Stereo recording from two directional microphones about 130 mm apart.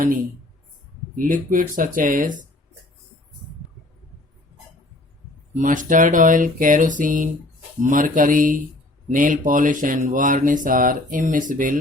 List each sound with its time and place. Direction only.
1.1 s speech: 90° right
5.5 s speech: 85° right